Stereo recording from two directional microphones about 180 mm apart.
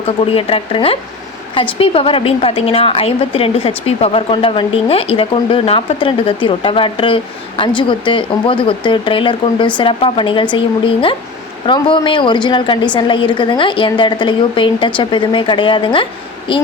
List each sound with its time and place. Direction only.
0.3 s a woman's voice: 30° left (ahead or behind)